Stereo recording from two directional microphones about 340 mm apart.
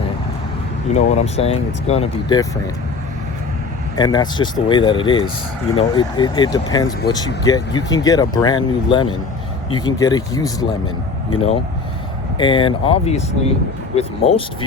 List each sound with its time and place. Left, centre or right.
0.9 s speech: centre
3.9 s speech: centre
12.4 s speech: centre